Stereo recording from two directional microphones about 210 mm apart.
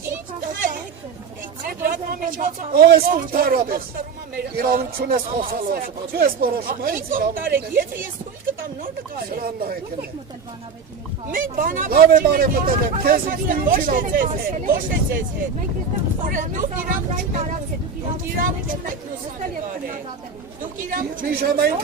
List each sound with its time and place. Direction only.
1.6 s speech: 40° right (ahead or behind)
9.3 s speech: 45° right (ahead or behind)
11.3 s speech: 40° right (ahead or behind)
16.2 s speech: 40° right (ahead or behind)
20.6 s speech: 40° right (ahead or behind)